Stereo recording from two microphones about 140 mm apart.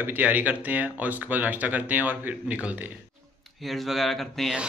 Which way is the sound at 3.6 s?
Centre (ahead or behind).